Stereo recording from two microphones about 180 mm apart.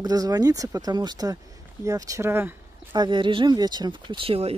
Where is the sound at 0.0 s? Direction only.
20° right (ahead or behind).